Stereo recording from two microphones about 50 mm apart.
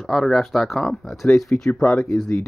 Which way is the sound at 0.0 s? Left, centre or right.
Centre.